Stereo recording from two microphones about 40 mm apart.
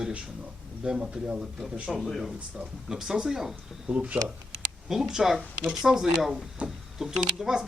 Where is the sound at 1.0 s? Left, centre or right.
Right.